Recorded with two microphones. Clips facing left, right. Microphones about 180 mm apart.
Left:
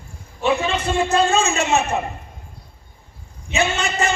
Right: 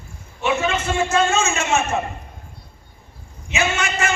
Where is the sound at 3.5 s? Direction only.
35° left (ahead or behind).